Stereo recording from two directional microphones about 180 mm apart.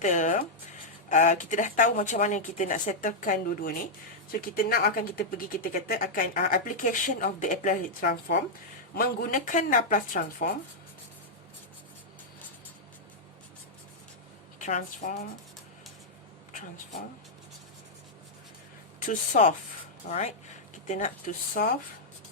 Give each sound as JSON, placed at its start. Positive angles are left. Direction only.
{"t": 0.0, "sound": "speech", "side_deg": 45}
{"t": 14.6, "sound": "speech", "side_deg": 45}
{"t": 18.9, "sound": "speech", "side_deg": 45}
{"t": 20.8, "sound": "speech", "side_deg": 40}